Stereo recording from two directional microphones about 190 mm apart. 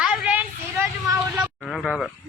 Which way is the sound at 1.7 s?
Centre (ahead or behind).